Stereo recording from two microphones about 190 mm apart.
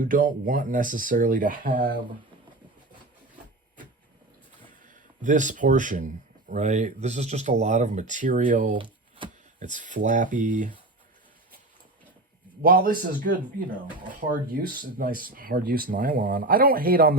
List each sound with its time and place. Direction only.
0.0 s speech: 45° right (ahead or behind)
5.2 s speech: 40° right (ahead or behind)
8.8 s a sound: 25° right (ahead or behind)
9.6 s speech: 40° right (ahead or behind)
12.6 s speech: 50° right (ahead or behind)